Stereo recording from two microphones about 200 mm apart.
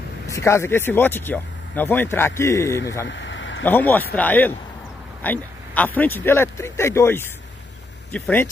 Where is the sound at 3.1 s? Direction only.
65° left (ahead or behind).